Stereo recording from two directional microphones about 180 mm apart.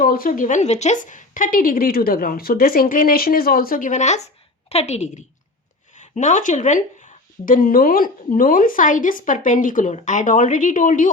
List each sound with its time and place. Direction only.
0.0 s a woman's voice: 50° left (ahead or behind)